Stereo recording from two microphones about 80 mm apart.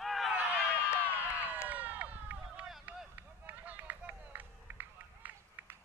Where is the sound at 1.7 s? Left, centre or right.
Right.